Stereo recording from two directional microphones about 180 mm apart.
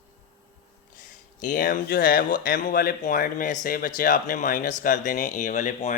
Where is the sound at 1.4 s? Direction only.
50° left (ahead or behind).